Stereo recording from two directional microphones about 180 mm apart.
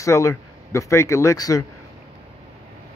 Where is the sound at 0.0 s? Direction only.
15° left (ahead or behind).